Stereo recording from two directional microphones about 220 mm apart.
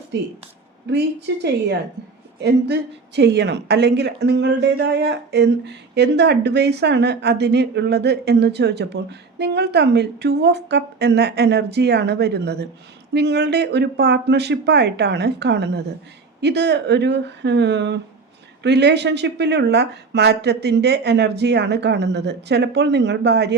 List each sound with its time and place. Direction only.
0.9 s a woman's voice: 50° right (ahead or behind)